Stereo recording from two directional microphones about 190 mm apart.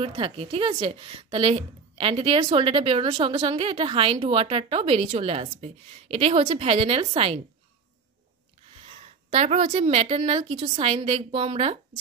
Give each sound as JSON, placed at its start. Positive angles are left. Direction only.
{"t": 0.0, "sound": "a woman's voice", "side_deg": -30}
{"t": 9.3, "sound": "a woman's voice", "side_deg": -35}